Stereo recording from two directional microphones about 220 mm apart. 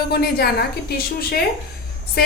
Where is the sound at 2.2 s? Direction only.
45° left (ahead or behind).